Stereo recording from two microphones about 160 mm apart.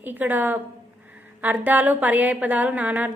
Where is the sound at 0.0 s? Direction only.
10° right (ahead or behind).